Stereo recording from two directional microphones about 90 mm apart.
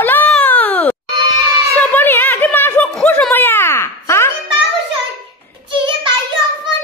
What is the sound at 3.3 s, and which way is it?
Wail, 25° left (ahead or behind).